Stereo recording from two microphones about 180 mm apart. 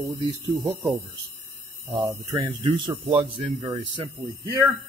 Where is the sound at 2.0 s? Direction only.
15° right (ahead or behind).